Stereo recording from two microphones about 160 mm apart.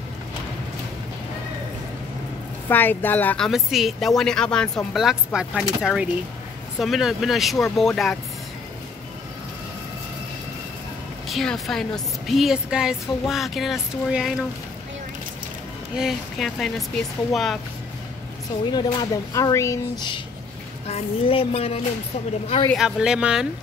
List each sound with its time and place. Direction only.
2.7 s speech: 10° left (ahead or behind)
11.2 s speech: centre (ahead or behind)
16.0 s speech: centre (ahead or behind)
18.7 s speech: 25° left (ahead or behind)
20.8 s speech: 40° left (ahead or behind)
22.8 s speech: 5° right (ahead or behind)